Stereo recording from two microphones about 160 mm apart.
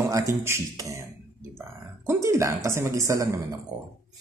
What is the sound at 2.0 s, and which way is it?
A woman's voice, 20° right (ahead or behind).